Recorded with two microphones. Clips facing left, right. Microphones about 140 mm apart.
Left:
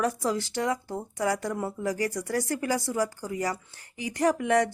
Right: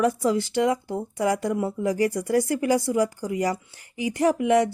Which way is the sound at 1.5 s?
70° right (ahead or behind).